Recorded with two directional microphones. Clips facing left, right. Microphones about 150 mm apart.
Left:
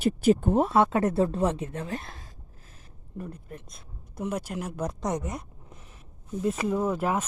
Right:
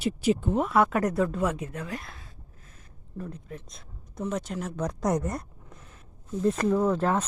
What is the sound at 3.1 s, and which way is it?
Speech, 10° left (ahead or behind).